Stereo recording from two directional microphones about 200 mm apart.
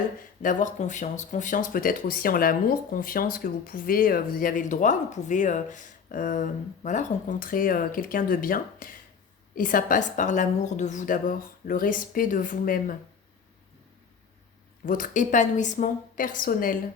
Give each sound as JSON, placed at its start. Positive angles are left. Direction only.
{"t": 0.4, "sound": "a woman's voice", "side_deg": 40}
{"t": 14.8, "sound": "a woman's voice", "side_deg": 40}